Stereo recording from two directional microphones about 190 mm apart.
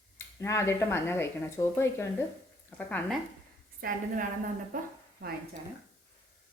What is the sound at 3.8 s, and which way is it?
A woman's voice, 50° right (ahead or behind).